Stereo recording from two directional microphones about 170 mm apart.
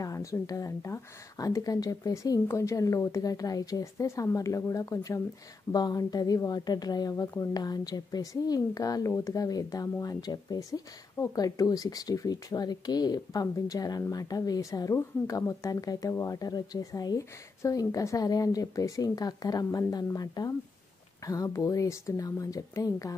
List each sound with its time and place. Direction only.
0.0 s speech: 20° left (ahead or behind)